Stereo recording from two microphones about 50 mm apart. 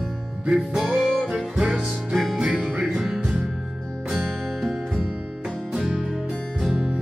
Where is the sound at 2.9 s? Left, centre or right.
Centre.